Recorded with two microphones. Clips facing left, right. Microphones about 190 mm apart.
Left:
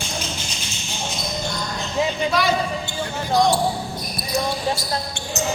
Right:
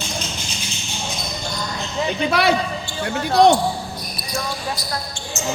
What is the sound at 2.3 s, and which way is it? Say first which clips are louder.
Speech: right 2 dB; 65° right (ahead or behind).